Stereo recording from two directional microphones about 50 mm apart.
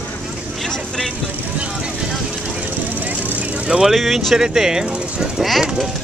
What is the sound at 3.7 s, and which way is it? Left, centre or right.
Speech, centre.